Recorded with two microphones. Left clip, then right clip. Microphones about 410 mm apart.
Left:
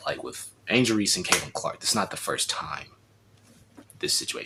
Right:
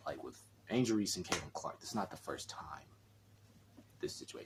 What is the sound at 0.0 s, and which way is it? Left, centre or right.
Speech, right.